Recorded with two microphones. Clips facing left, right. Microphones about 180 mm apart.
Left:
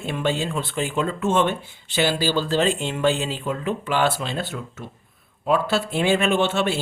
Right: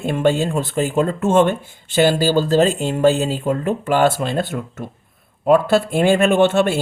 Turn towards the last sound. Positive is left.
turn(degrees=-50)  # may be behind; listen again after turning